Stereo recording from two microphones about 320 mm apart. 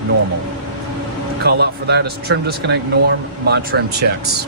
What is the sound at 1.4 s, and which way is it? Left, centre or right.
Speech, right.